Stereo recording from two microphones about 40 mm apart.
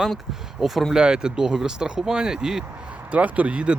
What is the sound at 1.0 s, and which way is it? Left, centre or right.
Speech, centre.